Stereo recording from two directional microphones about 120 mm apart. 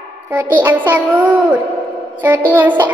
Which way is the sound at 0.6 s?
15° right (ahead or behind).